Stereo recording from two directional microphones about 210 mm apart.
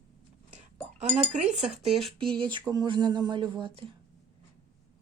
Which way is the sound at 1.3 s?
35° right (ahead or behind).